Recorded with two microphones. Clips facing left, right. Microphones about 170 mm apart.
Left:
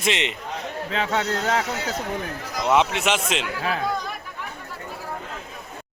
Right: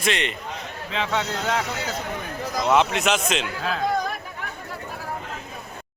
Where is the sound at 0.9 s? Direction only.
40° left (ahead or behind).